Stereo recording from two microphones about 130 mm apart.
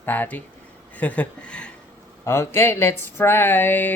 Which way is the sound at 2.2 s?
20° left (ahead or behind).